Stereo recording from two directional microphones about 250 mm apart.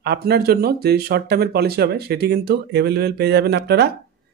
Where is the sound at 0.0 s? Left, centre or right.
Right.